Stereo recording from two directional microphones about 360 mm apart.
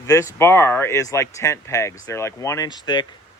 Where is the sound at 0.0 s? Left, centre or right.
Centre.